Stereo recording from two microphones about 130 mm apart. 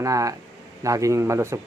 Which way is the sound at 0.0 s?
25° right (ahead or behind).